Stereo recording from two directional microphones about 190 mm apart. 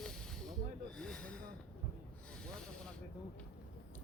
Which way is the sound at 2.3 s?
5° left (ahead or behind).